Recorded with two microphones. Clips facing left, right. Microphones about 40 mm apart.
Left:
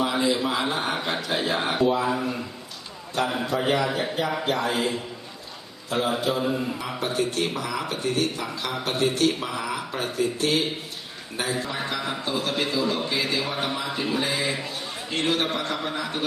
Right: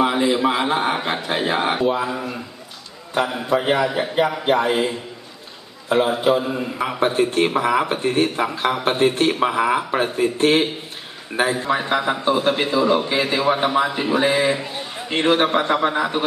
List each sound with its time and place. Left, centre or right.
0.0 s a man's voice: right
3.2 s a man's voice: centre
4.4 s a man's voice: right